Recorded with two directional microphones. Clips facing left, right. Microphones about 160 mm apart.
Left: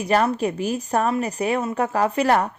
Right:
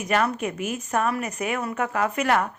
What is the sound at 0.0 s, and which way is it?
A woman's voice, 35° left (ahead or behind).